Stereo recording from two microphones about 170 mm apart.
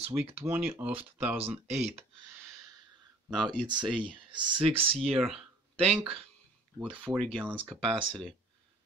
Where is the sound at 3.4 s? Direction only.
25° right (ahead or behind).